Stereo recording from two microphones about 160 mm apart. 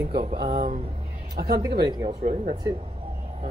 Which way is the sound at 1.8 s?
25° right (ahead or behind).